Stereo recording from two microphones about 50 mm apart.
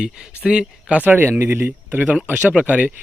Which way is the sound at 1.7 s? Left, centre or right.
Right.